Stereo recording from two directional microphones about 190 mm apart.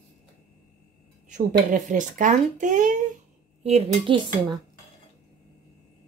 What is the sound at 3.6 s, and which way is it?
Speech, 30° right (ahead or behind).